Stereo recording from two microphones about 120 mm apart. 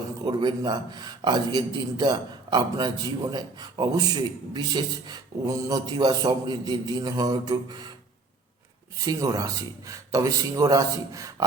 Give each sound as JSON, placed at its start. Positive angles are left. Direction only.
{"t": 0.3, "sound": "a man's voice", "side_deg": -35}
{"t": 9.0, "sound": "a man's voice", "side_deg": -30}